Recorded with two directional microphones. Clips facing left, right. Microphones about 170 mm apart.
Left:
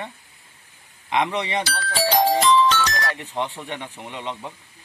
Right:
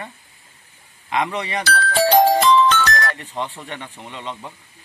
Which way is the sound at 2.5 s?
55° right (ahead or behind).